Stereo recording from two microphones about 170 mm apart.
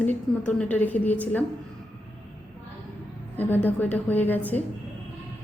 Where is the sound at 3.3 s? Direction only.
10° left (ahead or behind).